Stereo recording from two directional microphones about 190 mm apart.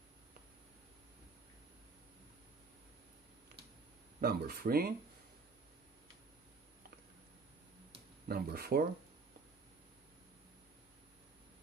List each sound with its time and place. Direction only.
4.2 s speech: 55° right (ahead or behind)
8.3 s speech: 55° right (ahead or behind)